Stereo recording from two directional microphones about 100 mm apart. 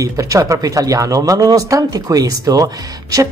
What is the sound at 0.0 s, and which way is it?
Speech, 35° right (ahead or behind).